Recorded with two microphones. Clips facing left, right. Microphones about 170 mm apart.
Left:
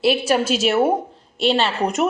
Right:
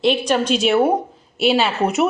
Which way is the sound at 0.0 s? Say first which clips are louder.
Even; 5° left (ahead or behind).